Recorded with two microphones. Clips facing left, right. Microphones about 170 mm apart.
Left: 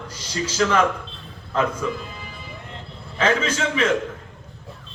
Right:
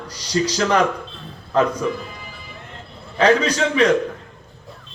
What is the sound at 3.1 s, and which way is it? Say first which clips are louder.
Speech: right 5 dB; 35° right (ahead or behind).